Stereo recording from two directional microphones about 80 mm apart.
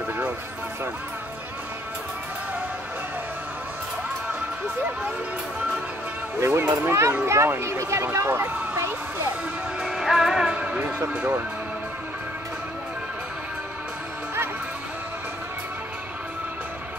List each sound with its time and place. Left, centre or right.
6.4 s speech: right
9.8 s music: centre